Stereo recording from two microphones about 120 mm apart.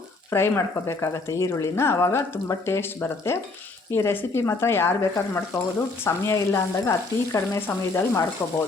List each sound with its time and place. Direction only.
0.3 s speech: 20° left (ahead or behind)